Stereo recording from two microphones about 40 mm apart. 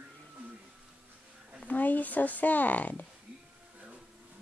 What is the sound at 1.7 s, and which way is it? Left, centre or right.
Speech, left.